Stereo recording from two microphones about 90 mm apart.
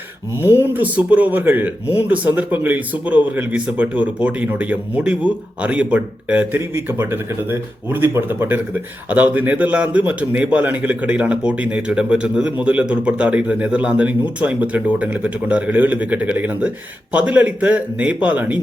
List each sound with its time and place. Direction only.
0.4 s speech: 25° right (ahead or behind)